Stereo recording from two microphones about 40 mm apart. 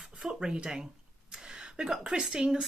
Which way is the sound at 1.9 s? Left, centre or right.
Centre.